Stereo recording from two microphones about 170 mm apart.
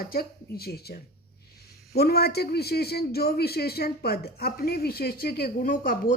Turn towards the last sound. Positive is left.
turn(degrees=55)  # may be behind; listen again after turning